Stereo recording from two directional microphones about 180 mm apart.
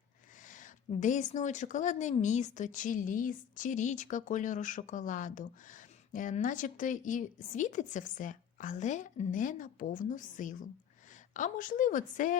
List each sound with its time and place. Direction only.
0.4 s a woman's voice: 45° left (ahead or behind)